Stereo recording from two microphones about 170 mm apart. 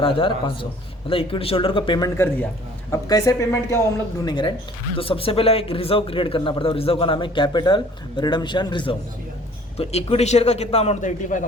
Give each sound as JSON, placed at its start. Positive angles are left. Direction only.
{"t": 0.0, "sound": "speech", "side_deg": 30}
{"t": 2.1, "sound": "a man's voice", "side_deg": 10}